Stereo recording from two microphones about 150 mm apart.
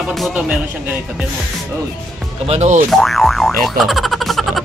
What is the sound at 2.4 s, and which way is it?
Speech, 45° right (ahead or behind).